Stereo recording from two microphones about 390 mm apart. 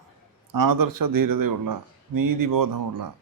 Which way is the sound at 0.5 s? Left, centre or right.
Right.